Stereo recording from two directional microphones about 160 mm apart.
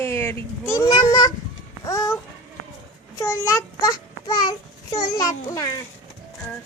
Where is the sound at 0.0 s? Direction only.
15° left (ahead or behind).